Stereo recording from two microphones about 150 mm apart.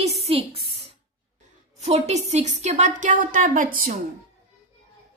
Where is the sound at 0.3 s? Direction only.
40° right (ahead or behind).